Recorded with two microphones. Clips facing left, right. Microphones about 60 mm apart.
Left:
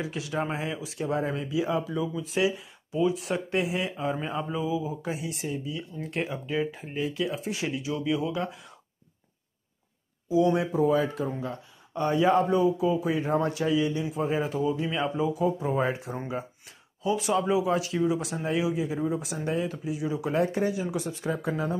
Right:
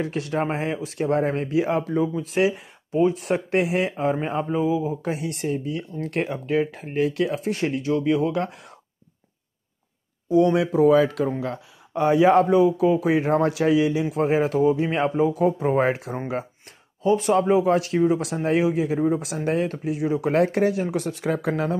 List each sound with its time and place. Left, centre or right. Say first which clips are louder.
0.0 s speech: right 6 dB; right
4.6 s speech: right 8 dB; right
5.1 s speech: right 6 dB; right
10.5 s a man's voice: right 7 dB; right
13.1 s a man's voice: right 6 dB; right
14.6 s speech: right 7 dB; right
17.0 s speech: right 6 dB; right
17.9 s speech: right 6 dB; right
18.9 s speech: right 7 dB; right
19.4 s speech: right 5 dB; right